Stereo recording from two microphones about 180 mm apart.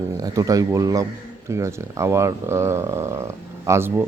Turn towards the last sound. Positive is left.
turn(degrees=-15)  # may be behind; listen again after turning